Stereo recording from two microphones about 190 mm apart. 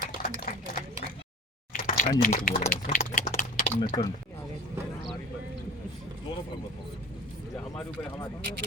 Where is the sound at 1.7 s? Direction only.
40° left (ahead or behind).